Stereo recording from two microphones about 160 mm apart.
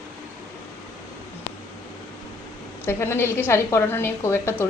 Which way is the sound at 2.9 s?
15° left (ahead or behind).